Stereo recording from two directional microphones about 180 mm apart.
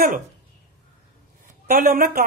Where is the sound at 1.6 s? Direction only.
50° right (ahead or behind).